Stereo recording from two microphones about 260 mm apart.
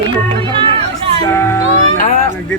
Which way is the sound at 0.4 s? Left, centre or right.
Centre.